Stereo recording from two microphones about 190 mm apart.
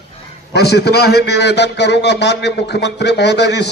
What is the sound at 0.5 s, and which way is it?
A man's voice, 60° left (ahead or behind).